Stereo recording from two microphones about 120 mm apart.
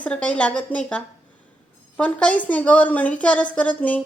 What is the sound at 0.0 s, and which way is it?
A woman's voice, 10° left (ahead or behind).